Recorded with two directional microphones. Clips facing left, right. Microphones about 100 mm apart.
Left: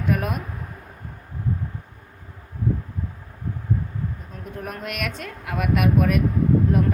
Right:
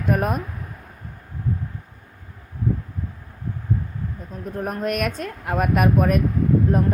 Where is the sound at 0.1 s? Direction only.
40° right (ahead or behind).